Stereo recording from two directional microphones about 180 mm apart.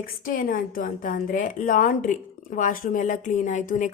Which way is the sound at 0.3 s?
50° left (ahead or behind).